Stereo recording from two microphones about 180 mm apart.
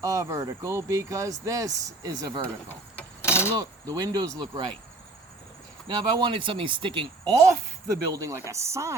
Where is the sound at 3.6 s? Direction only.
20° right (ahead or behind).